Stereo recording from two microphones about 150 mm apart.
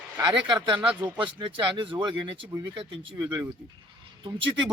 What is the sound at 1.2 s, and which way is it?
A man's voice, 30° right (ahead or behind).